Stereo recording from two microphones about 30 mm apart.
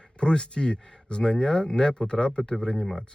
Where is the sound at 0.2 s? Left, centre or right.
Left.